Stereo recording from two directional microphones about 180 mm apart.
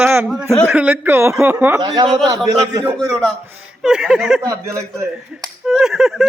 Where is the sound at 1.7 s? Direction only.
20° right (ahead or behind).